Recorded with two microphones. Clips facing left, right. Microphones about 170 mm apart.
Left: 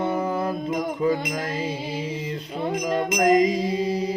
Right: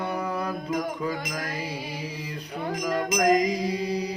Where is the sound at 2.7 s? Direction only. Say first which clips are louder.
Left 3 dB; 25° left (ahead or behind).